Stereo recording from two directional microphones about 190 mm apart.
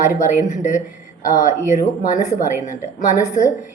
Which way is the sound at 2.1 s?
40° left (ahead or behind).